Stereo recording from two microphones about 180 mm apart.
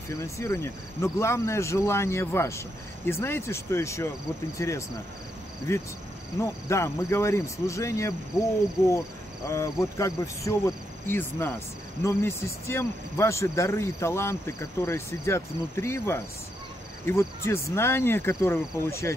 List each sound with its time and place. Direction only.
0.1 s speech: 15° left (ahead or behind)
9.5 s speech: 15° left (ahead or behind)